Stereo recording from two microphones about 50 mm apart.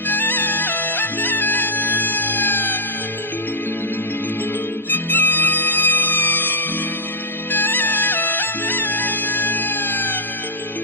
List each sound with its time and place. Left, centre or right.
0.1 s music: left
4.9 s music: left